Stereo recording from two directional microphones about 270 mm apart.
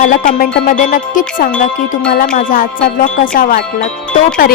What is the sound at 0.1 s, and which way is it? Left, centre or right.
Music, left.